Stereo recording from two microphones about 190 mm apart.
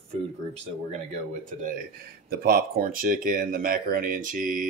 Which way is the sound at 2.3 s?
55° right (ahead or behind).